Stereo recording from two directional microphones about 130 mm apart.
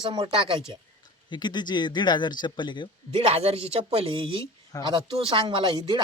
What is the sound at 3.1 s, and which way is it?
A man's voice, 50° right (ahead or behind).